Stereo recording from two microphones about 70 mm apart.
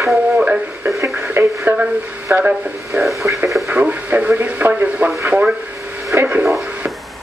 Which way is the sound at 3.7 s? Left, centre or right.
Right.